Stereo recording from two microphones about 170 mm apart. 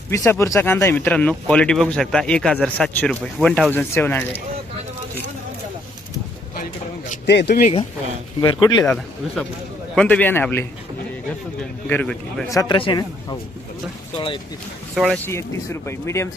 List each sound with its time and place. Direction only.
0.1 s speech: 15° left (ahead or behind)
7.3 s speech: 80° left
8.4 s speech: 25° left (ahead or behind)
8.8 s speech: 5° left (ahead or behind)
11.9 s speech: 10° left (ahead or behind)
12.5 s speech: 25° left (ahead or behind)
14.9 s speech: centre (ahead or behind)
15.3 s speech: 15° left (ahead or behind)